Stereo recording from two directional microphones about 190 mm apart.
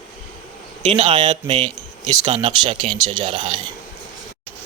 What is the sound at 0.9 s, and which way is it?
Speech, 30° right (ahead or behind).